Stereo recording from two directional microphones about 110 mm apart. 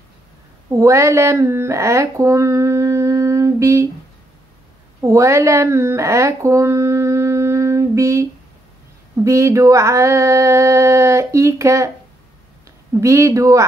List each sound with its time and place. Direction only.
0.7 s speech: 30° right (ahead or behind)
5.0 s speech: 30° right (ahead or behind)
13.0 s speech: 30° right (ahead or behind)